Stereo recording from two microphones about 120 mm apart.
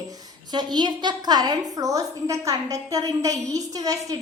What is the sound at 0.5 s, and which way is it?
A woman's voice, 35° right (ahead or behind).